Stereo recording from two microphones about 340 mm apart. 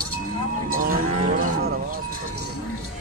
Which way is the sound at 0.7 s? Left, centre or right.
Right.